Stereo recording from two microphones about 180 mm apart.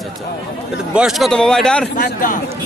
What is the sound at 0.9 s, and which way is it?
Speech, centre (ahead or behind).